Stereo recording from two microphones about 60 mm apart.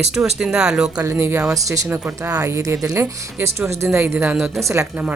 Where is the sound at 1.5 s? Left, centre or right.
Right.